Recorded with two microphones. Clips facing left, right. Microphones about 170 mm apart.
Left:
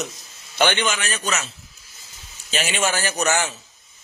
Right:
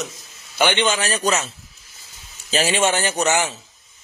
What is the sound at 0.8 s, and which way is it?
Speech, 30° right (ahead or behind).